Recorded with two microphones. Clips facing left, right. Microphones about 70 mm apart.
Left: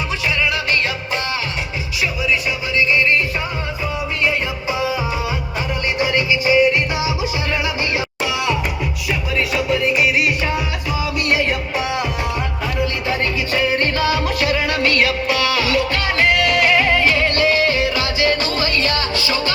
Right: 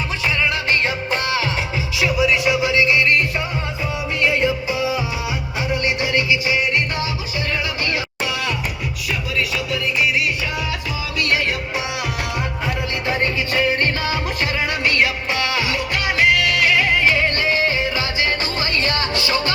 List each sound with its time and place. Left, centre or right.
2.0 s music: right
6.0 s music: centre
9.8 s music: left
12.6 s music: right
16.0 s music: centre
17.0 s music: centre; by 19.4 s right